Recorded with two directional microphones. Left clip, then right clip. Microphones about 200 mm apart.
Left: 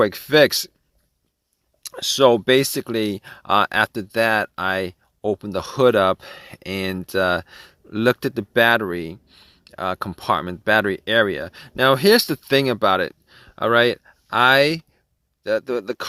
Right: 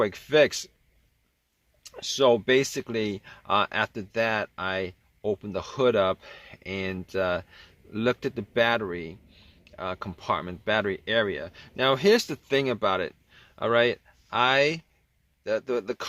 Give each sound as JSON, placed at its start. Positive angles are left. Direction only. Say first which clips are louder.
{"t": 0.0, "sound": "speech", "louder": "left 6 dB", "side_deg": 45}
{"t": 1.8, "sound": "speech", "louder": "left 7 dB", "side_deg": 55}